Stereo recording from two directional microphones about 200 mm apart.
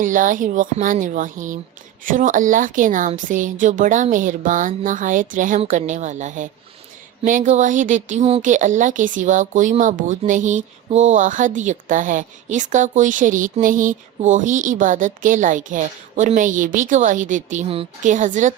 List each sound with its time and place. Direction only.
0.0 s speech: 40° right (ahead or behind)